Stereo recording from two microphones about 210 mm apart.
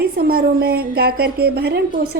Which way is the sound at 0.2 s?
45° right (ahead or behind).